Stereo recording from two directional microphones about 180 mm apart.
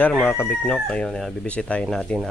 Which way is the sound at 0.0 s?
10° left (ahead or behind).